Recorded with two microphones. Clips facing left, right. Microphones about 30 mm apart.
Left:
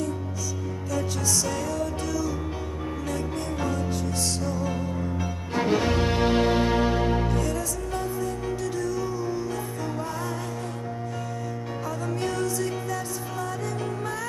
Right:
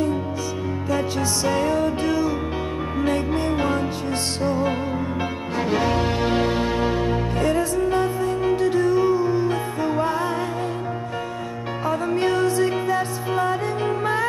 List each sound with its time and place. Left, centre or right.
0.8 s music: right
7.4 s music: right
11.8 s music: right